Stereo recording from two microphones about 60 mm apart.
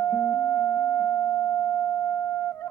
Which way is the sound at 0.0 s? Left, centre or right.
Left.